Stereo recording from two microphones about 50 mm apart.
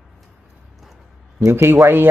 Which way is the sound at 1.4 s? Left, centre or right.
Right.